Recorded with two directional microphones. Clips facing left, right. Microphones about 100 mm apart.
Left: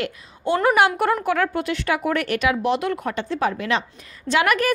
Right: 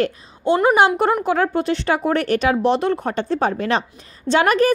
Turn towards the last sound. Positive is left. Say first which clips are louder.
# right 4 dB
turn(degrees=-30)  # may be behind; listen again after turning